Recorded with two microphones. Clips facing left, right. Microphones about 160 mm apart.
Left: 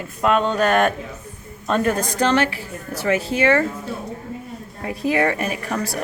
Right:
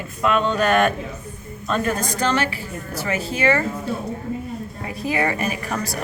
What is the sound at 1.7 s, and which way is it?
Speech, 60° left (ahead or behind).